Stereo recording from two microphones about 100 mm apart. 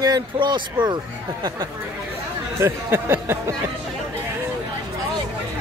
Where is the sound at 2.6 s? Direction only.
25° right (ahead or behind).